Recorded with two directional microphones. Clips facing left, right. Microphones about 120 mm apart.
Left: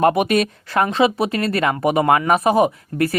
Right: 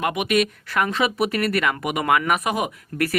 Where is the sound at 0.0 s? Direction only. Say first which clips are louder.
Left 5 dB; 35° left (ahead or behind).